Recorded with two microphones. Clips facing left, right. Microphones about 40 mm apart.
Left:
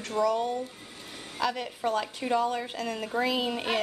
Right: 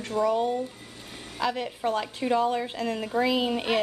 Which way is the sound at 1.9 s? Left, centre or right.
Centre.